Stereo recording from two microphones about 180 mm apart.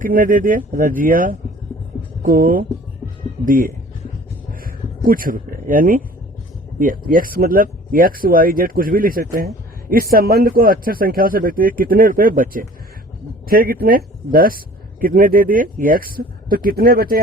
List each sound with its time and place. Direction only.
0.0 s speech: 50° right (ahead or behind)
5.0 s speech: 50° right (ahead or behind)